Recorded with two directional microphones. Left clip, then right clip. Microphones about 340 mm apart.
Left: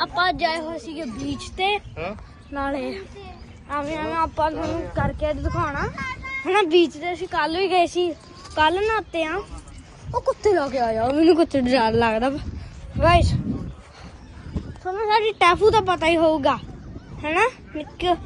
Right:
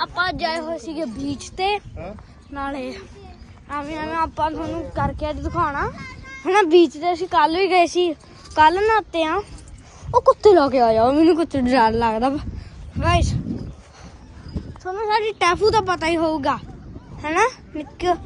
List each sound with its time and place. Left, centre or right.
0.0 s speech: centre
5.9 s speech: left
6.4 s speech: centre
10.1 s speech: right
11.2 s speech: centre
14.5 s speech: centre